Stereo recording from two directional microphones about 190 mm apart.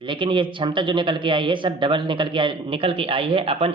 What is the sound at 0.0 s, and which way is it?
A man's voice, 25° right (ahead or behind).